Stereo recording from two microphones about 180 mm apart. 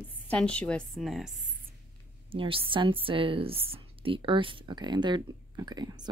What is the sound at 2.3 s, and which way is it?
Speech, 30° right (ahead or behind).